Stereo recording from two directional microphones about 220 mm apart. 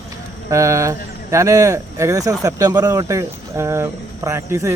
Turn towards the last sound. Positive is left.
turn(degrees=-10)  # may be behind; listen again after turning